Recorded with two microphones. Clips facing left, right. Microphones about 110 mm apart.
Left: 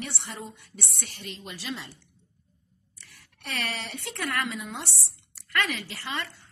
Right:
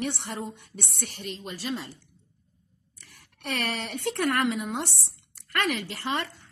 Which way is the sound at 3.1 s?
55° right (ahead or behind).